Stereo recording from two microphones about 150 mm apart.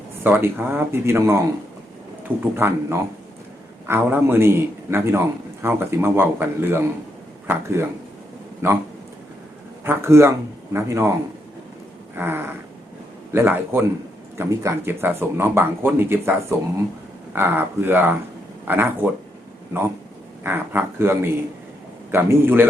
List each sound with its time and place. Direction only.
0.2 s speech: 15° right (ahead or behind)
2.4 s speech: 15° right (ahead or behind)
9.8 s speech: 15° right (ahead or behind)
12.1 s speech: 15° right (ahead or behind)
20.4 s speech: 15° right (ahead or behind)